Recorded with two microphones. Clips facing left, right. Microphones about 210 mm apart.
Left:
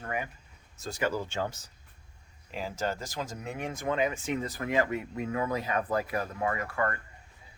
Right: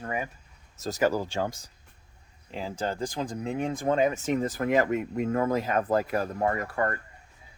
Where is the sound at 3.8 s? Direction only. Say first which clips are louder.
Right 4 dB; 40° right (ahead or behind).